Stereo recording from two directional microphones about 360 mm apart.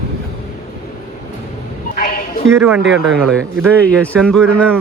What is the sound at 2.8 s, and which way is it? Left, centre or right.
Speech, right.